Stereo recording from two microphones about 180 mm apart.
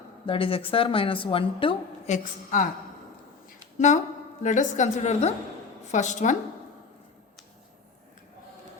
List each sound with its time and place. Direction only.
0.3 s a woman's voice: 30° left (ahead or behind); by 2.6 s 45° left (ahead or behind)
3.8 s a woman's voice: 40° left (ahead or behind)